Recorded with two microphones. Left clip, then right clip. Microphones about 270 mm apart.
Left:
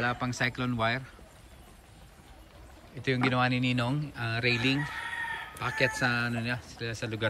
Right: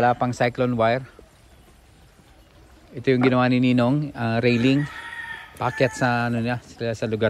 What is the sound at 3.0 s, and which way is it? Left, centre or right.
Speech, centre.